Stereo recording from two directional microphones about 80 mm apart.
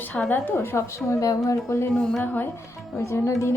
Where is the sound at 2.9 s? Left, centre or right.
Left.